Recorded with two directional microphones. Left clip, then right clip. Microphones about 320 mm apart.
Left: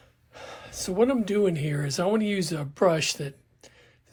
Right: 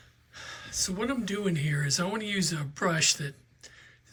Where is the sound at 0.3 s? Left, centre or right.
Centre.